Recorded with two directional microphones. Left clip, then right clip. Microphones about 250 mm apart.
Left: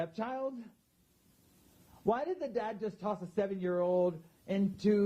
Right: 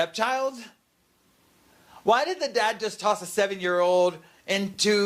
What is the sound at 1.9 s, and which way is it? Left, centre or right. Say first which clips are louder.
Speech: right 11 dB; centre.